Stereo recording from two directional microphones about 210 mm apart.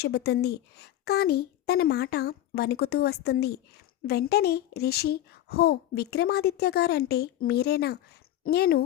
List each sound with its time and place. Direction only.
0.0 s a child's voice: 50° left (ahead or behind)